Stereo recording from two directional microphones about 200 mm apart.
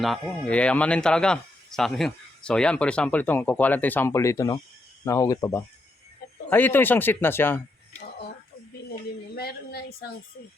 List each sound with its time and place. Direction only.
0.0 s speech: 5° left (ahead or behind)
9.3 s a woman's voice: 50° left (ahead or behind)